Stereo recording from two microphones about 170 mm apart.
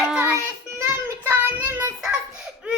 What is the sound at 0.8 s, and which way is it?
Child singing, 15° right (ahead or behind).